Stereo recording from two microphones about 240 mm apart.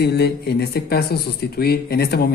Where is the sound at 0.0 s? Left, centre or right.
Left.